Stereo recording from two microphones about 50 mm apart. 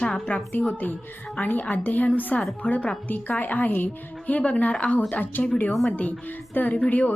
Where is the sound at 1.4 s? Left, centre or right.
Left.